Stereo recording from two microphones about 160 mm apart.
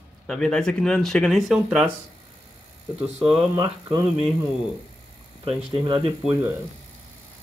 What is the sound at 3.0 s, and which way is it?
Speech, 5° right (ahead or behind).